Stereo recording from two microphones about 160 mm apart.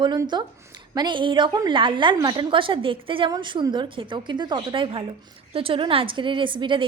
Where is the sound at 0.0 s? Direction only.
30° right (ahead or behind).